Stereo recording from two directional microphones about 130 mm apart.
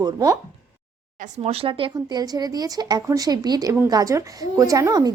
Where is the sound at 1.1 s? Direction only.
70° right (ahead or behind).